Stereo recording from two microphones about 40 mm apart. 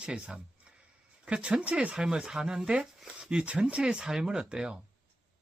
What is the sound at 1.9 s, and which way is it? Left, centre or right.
Speech, centre.